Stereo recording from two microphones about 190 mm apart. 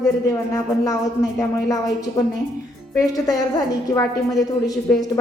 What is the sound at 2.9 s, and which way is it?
A woman's voice, 20° left (ahead or behind).